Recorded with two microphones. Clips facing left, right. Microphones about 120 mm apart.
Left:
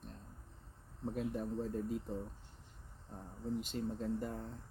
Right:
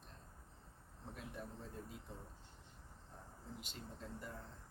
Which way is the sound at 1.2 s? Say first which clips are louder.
Left 12 dB; 40° left (ahead or behind).